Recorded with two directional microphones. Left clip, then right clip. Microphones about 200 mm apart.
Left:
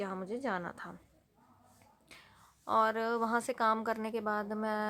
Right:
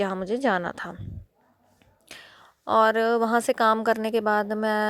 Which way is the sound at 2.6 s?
35° right (ahead or behind).